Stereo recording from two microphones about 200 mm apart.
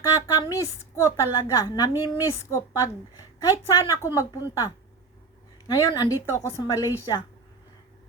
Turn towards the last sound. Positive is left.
turn(degrees=15)  # may be behind; listen again after turning